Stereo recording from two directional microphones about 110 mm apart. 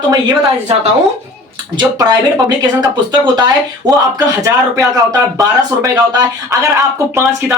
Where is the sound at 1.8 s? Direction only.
40° right (ahead or behind).